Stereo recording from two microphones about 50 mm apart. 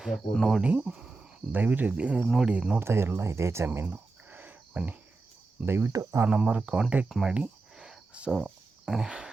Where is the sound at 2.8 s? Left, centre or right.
Right.